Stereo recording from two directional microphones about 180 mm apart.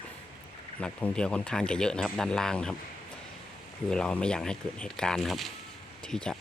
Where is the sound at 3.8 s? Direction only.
5° left (ahead or behind).